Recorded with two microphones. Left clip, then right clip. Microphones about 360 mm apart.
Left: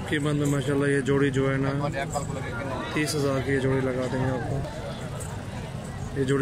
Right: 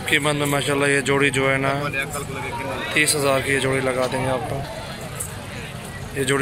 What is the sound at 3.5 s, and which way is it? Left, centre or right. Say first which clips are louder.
Speech: right 5 dB; right.